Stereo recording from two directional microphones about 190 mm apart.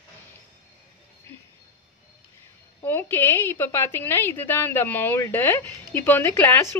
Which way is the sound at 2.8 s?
10° left (ahead or behind).